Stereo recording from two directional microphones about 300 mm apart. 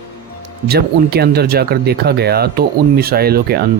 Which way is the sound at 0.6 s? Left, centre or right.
Right.